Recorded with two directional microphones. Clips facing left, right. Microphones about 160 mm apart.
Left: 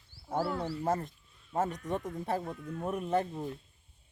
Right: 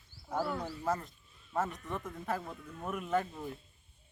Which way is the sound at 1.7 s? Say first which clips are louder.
Left 5 dB; 40° left (ahead or behind).